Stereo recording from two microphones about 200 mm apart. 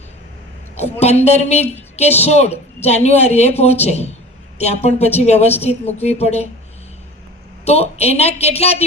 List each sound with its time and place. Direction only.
0.8 s a woman's voice: 30° left (ahead or behind)
7.6 s a woman's voice: 30° left (ahead or behind)